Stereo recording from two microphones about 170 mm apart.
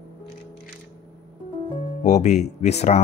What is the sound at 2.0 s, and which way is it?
Speech, 45° left (ahead or behind).